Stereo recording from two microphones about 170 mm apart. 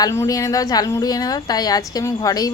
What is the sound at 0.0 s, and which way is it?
A woman's voice, 20° left (ahead or behind).